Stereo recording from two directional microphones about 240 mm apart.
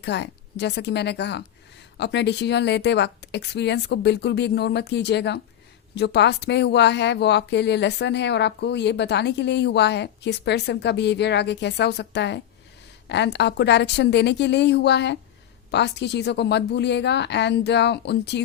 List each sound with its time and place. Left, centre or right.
0.0 s speech: left